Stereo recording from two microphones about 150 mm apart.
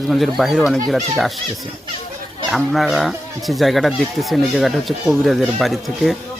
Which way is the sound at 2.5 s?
Centre (ahead or behind).